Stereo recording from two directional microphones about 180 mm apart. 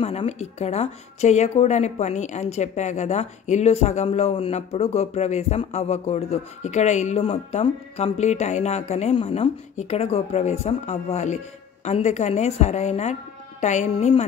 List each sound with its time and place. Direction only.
0.0 s a woman's voice: 35° left (ahead or behind)